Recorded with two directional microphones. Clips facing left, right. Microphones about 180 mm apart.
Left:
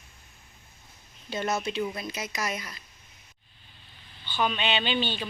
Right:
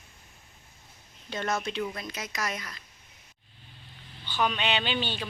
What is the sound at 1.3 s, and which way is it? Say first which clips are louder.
Speech: left 2 dB; 5° left (ahead or behind).